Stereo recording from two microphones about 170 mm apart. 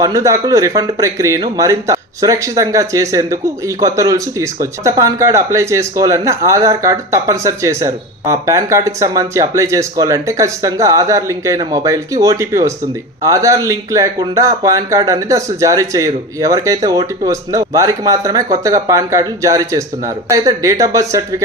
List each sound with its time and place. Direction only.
0.0 s speech: 20° right (ahead or behind)